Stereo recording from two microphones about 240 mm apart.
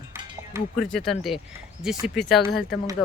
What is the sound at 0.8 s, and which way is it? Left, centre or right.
Speech, centre.